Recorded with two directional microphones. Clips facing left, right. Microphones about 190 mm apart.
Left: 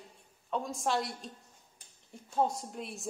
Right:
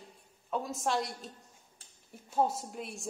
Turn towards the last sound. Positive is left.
turn(degrees=0)  # may be behind; listen again after turning